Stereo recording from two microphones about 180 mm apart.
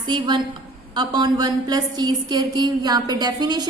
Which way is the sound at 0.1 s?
25° right (ahead or behind).